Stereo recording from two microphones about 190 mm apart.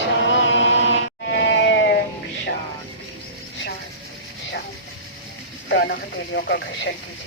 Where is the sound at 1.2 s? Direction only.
60° left (ahead or behind).